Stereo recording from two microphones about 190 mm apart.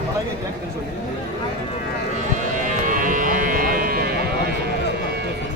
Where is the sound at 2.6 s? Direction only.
45° right (ahead or behind).